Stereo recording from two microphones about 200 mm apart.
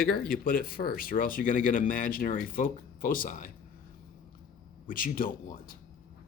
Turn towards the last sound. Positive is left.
turn(degrees=45)  # may be behind; listen again after turning